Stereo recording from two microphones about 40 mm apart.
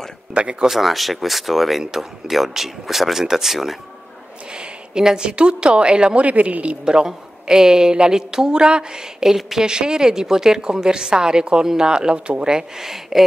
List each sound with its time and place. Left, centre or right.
0.3 s speech: right
0.7 s a woman's voice: centre
4.5 s a woman's voice: right
6.2 s a woman's voice: right
6.8 s a woman's voice: centre